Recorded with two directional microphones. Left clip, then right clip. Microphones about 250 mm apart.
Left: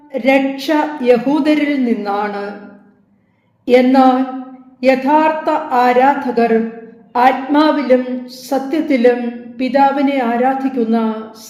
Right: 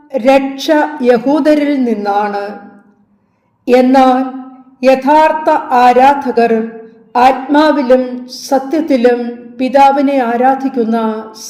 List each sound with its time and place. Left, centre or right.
0.1 s a woman's voice: right
3.7 s a woman's voice: right